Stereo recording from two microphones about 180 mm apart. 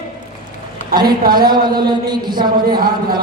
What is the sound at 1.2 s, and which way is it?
Speech, 55° right (ahead or behind).